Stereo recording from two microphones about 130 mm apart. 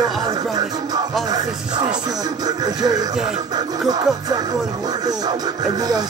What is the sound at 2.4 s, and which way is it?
Speech, 30° right (ahead or behind).